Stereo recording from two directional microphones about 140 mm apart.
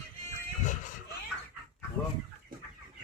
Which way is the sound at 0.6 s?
60° left (ahead or behind).